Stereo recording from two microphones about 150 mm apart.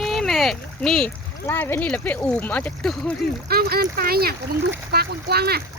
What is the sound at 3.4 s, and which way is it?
Speech, 90° right.